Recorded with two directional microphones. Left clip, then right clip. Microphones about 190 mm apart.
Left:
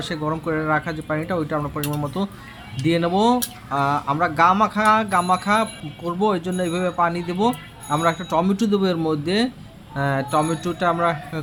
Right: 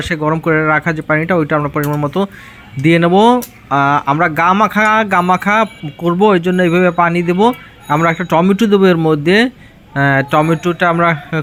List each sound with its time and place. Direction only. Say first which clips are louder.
0.1 s speech: right 11 dB; 30° right (ahead or behind)